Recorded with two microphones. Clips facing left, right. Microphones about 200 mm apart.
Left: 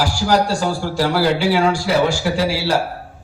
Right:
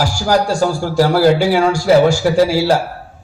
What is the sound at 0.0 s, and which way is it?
A man's voice, 45° right (ahead or behind).